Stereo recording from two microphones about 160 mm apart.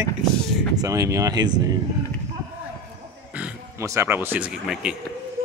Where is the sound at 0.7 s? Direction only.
20° right (ahead or behind).